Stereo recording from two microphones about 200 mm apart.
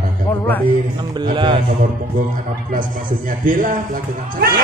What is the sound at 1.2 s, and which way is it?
Speech, 25° right (ahead or behind).